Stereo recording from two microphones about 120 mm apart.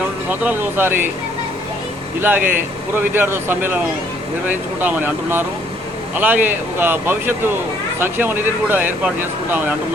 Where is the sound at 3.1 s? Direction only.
20° right (ahead or behind).